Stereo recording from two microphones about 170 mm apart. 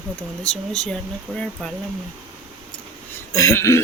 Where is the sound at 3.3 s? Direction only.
20° left (ahead or behind).